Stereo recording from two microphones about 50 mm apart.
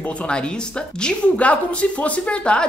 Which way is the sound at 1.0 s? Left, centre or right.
Left.